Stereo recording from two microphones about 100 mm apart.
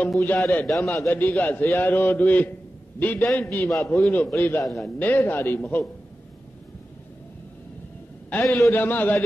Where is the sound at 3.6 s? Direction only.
30° left (ahead or behind).